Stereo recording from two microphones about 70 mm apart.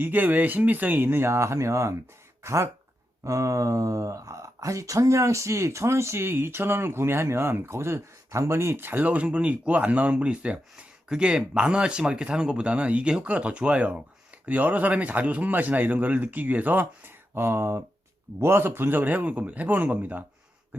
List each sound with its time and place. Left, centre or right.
0.0 s a man's voice: right